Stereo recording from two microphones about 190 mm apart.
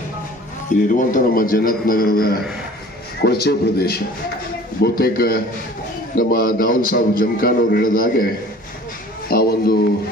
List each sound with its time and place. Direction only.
0.7 s a man's voice: 45° left (ahead or behind)
9.3 s a man's voice: 55° left (ahead or behind)